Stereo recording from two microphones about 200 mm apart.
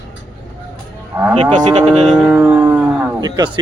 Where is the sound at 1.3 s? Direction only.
35° right (ahead or behind).